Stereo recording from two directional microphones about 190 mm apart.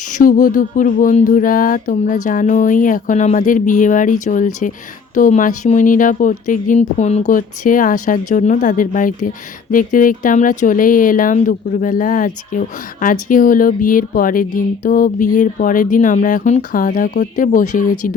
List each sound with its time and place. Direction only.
0.1 s speech: 45° left (ahead or behind)